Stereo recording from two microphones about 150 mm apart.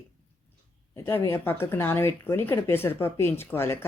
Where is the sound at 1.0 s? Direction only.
15° left (ahead or behind).